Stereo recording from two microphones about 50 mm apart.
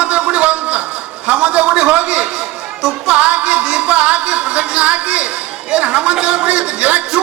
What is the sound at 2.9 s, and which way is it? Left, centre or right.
A man's voice, right.